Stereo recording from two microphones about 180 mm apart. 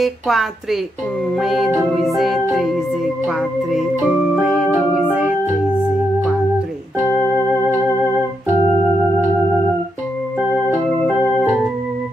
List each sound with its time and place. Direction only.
0.0 s music: centre (ahead or behind)
3.7 s organ: centre (ahead or behind)